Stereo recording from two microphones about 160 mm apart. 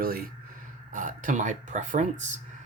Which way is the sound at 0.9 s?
55° right (ahead or behind).